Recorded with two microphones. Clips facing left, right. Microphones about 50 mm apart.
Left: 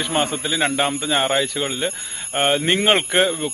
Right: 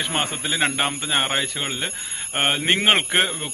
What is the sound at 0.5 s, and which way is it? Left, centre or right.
Speech, centre.